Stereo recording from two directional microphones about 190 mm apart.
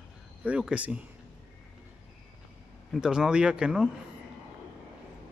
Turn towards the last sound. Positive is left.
turn(degrees=-5)  # may be behind; listen again after turning